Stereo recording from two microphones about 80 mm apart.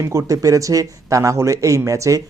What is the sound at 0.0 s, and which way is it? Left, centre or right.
A man's voice, right.